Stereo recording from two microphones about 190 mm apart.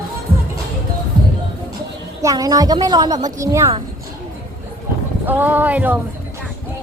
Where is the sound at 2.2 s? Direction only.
20° right (ahead or behind).